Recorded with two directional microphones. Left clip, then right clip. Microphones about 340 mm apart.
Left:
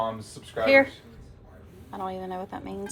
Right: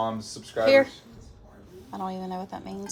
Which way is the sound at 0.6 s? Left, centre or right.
Centre.